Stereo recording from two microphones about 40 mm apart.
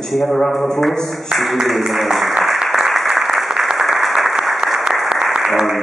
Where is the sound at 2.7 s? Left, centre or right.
Centre.